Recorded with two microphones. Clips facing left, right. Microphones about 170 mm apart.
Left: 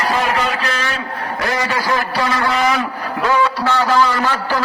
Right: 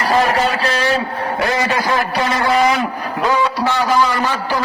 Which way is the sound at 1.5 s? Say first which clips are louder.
Even; 25° right (ahead or behind).